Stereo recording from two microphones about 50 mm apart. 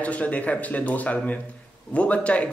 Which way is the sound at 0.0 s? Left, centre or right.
Left.